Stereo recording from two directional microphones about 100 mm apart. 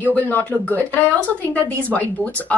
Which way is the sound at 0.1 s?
20° left (ahead or behind).